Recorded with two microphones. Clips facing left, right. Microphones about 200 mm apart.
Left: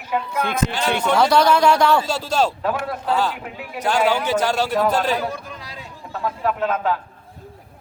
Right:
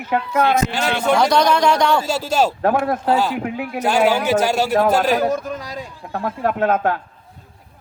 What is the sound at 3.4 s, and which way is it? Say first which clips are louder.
Speech: right 8 dB; 60° right (ahead or behind).